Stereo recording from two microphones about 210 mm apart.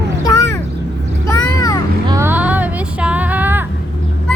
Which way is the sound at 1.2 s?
15° left (ahead or behind).